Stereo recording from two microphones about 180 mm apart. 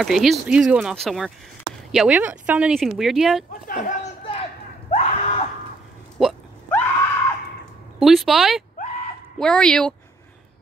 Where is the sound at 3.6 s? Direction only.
50° left (ahead or behind).